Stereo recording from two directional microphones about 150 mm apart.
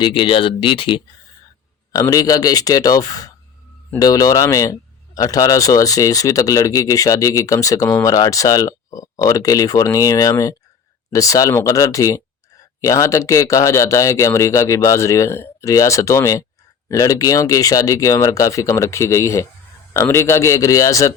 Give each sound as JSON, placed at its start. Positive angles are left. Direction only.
{"t": 0.0, "sound": "speech", "side_deg": 35}